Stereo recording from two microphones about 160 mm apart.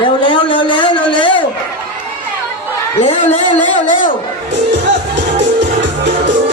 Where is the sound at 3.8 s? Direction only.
55° left (ahead or behind).